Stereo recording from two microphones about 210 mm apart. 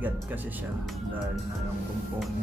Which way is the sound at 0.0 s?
10° right (ahead or behind).